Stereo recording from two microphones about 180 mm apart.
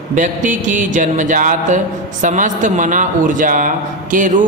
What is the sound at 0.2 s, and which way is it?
A woman's voice, 45° right (ahead or behind).